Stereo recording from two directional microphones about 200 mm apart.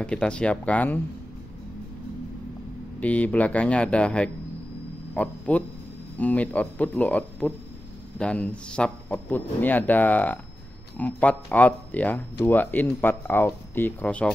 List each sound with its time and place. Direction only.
0.0 s speech: 5° left (ahead or behind)
3.0 s a man's voice: 5° left (ahead or behind)